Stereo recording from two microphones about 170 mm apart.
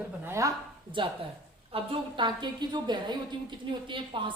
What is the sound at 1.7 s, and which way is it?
A woman's voice, 30° right (ahead or behind).